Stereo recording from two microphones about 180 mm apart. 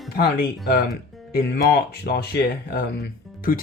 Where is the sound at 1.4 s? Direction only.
60° left (ahead or behind).